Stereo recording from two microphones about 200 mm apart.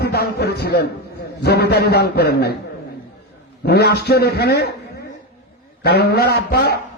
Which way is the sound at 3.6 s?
55° left (ahead or behind).